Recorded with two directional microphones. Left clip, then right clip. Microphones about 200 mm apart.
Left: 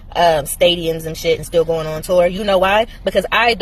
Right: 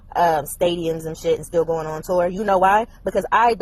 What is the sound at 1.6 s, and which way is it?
Speech, 20° right (ahead or behind).